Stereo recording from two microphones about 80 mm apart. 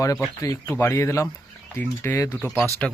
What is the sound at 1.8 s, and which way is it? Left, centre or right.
Speech, left.